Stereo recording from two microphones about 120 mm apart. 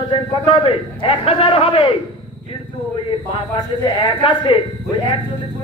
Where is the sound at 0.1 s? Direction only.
50° left (ahead or behind).